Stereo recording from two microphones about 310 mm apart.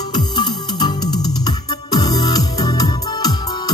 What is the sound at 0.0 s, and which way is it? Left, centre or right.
Music, centre.